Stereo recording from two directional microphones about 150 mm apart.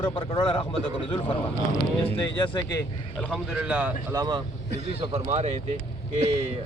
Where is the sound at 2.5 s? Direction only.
25° left (ahead or behind).